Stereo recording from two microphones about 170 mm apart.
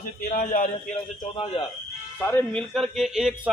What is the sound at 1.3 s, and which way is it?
Speech, 30° left (ahead or behind).